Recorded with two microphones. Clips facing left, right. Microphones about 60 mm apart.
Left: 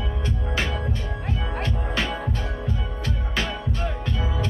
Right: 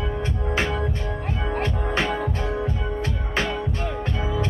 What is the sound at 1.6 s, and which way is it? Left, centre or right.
Music, right.